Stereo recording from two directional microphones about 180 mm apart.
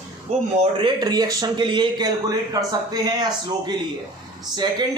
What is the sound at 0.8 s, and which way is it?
A man's voice, 20° right (ahead or behind).